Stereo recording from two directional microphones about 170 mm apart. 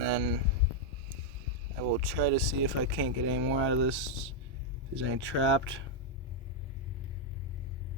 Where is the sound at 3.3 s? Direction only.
90° right.